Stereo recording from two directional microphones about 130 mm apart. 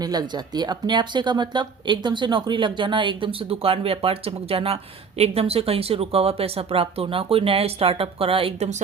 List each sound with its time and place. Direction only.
0.0 s speech: 30° right (ahead or behind)